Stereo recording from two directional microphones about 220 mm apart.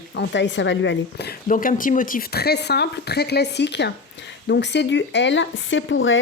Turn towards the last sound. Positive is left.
turn(degrees=60)  # may be behind; listen again after turning